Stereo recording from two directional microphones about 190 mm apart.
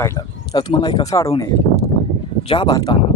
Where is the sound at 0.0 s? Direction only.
15° left (ahead or behind).